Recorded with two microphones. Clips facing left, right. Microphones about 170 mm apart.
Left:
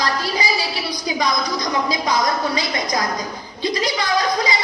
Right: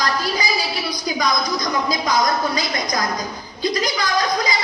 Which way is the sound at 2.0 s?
30° left (ahead or behind).